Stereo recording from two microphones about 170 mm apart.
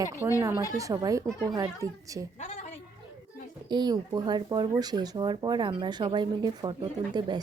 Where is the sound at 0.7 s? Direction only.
20° right (ahead or behind).